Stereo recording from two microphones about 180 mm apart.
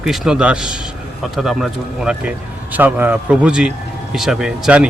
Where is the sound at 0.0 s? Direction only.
Centre (ahead or behind).